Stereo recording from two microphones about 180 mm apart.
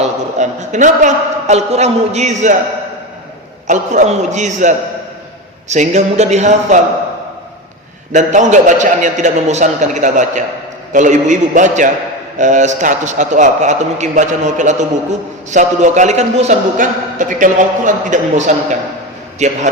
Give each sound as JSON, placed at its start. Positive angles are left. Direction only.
{"t": 0.0, "sound": "a man's voice", "side_deg": -40}
{"t": 3.7, "sound": "a man's voice", "side_deg": -40}
{"t": 8.1, "sound": "a man's voice", "side_deg": -40}